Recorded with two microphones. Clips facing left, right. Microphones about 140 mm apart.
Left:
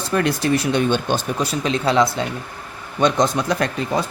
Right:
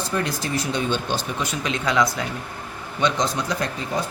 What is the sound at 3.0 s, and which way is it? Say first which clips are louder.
Speech: left 5 dB; 55° left (ahead or behind).